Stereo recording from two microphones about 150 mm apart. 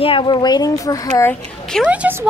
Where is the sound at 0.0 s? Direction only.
35° left (ahead or behind).